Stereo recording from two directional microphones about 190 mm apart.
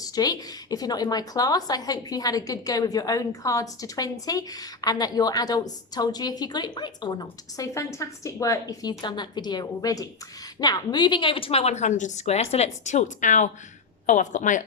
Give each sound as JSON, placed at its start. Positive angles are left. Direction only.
{"t": 0.0, "sound": "a woman's voice", "side_deg": 20}